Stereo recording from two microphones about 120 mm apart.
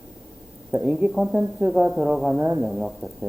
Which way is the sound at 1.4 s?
20° right (ahead or behind).